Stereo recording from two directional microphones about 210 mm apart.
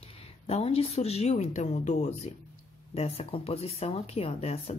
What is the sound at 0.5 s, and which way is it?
A woman's voice, 30° left (ahead or behind).